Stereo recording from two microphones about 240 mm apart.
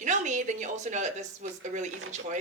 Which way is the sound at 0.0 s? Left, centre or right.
Right.